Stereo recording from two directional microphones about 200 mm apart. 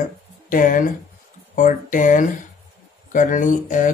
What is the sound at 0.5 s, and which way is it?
Speech, 45° left (ahead or behind).